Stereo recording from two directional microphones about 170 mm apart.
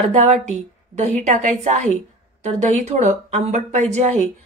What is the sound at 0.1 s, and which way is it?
Speech, 40° right (ahead or behind).